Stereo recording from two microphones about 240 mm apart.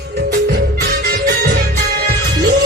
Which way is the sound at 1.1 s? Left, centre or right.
Right.